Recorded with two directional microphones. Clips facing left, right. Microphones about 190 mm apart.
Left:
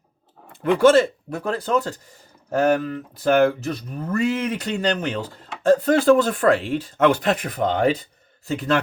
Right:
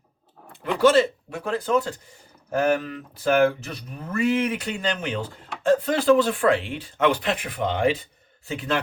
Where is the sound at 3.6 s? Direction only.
40° left (ahead or behind).